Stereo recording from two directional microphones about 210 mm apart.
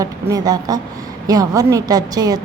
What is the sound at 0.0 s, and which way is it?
A woman's voice, 15° right (ahead or behind).